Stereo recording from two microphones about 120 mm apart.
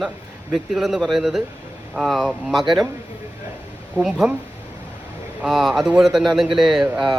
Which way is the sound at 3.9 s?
5° right (ahead or behind).